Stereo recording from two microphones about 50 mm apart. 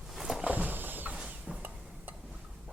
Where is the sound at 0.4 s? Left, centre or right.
Right.